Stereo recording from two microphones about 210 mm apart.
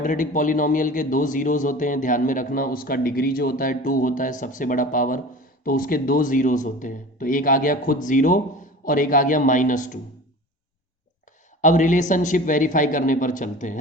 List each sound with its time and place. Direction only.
0.0 s a man's voice: 40° left (ahead or behind)
11.6 s a man's voice: 35° left (ahead or behind)